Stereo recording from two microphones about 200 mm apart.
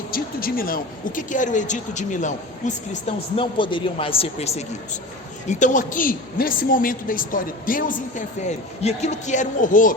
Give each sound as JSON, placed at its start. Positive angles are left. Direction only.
{"t": 0.1, "sound": "a woman's voice", "side_deg": 45}
{"t": 3.1, "sound": "a man's voice", "side_deg": 25}
{"t": 8.4, "sound": "a woman's voice", "side_deg": 30}